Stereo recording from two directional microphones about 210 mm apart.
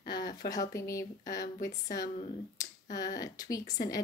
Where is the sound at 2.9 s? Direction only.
15° left (ahead or behind).